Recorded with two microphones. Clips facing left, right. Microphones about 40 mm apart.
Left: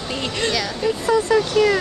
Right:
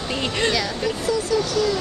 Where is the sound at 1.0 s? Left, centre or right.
Left.